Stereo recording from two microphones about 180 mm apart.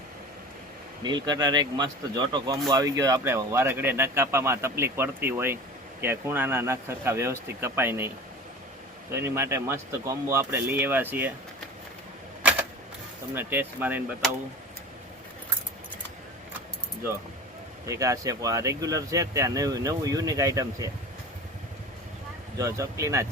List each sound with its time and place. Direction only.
1.0 s speech: 25° right (ahead or behind)
9.1 s speech: 15° right (ahead or behind)
12.4 s typewriter: 10° right (ahead or behind)
13.3 s speech: 10° right (ahead or behind)
17.8 s speech: 15° right (ahead or behind)
22.5 s speech: 15° right (ahead or behind)